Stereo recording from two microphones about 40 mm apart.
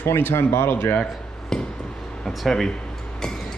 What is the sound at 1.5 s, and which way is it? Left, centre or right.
Speech, centre.